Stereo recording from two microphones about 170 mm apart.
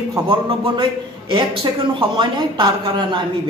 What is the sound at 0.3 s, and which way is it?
Speech, 30° right (ahead or behind).